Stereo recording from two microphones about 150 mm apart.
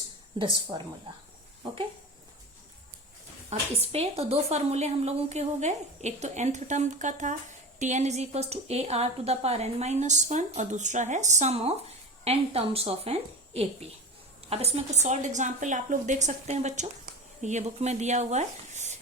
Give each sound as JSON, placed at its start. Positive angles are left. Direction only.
{"t": 0.3, "sound": "speech", "side_deg": -35}
{"t": 3.5, "sound": "a woman's voice", "side_deg": -40}